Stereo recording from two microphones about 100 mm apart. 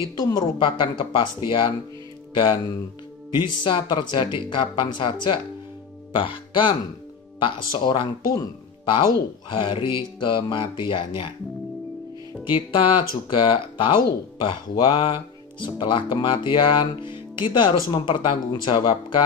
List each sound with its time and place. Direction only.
0.3 s speech: 50° left (ahead or behind)
12.4 s speech: 60° left (ahead or behind)